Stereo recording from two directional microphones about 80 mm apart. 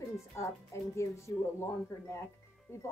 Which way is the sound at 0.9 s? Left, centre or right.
Left.